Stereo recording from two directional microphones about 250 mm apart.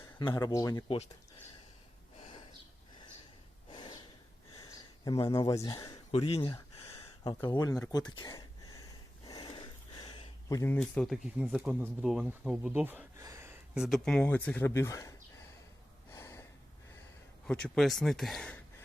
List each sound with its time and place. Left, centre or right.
0.2 s speech: centre
3.7 s snort: centre
4.5 s a sound: centre
9.2 s speech: centre
16.1 s a sound: centre
17.4 s speech: centre